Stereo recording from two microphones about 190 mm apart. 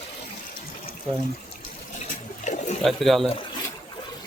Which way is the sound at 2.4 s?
40° left (ahead or behind).